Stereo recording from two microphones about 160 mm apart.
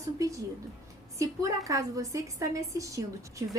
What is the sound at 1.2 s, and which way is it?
A woman's voice, 20° right (ahead or behind).